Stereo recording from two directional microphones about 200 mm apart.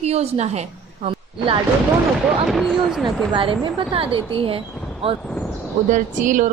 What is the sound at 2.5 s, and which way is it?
Speech, centre (ahead or behind).